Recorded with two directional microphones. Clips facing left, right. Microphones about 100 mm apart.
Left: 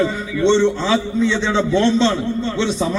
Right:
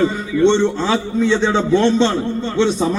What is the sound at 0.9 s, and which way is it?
A man's voice, 50° right (ahead or behind).